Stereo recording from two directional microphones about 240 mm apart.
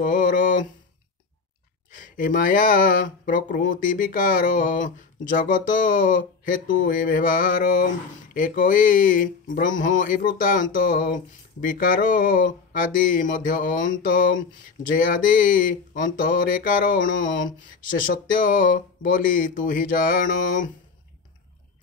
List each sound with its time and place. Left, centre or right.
0.0 s mantra: left
2.0 s speech: left